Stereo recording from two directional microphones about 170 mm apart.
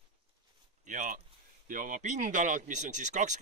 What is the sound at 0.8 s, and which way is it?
Speech, 50° right (ahead or behind).